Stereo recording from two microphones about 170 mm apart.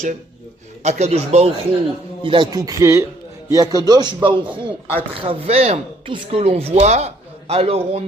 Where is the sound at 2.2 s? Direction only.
25° right (ahead or behind).